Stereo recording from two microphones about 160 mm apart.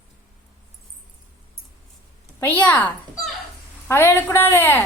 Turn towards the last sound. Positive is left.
turn(degrees=15)  # may be behind; listen again after turning